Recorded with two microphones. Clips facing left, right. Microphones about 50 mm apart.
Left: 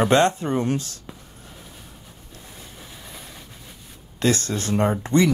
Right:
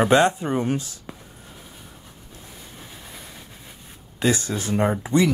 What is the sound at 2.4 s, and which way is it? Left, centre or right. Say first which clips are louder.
Vehicle: even; centre.